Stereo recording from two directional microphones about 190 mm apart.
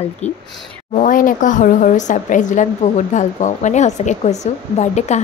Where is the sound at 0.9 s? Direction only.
45° left (ahead or behind).